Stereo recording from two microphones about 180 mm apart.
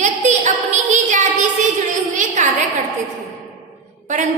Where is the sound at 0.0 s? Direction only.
40° right (ahead or behind).